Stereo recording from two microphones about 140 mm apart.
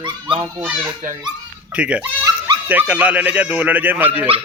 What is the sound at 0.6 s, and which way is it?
A child's voice, 10° right (ahead or behind).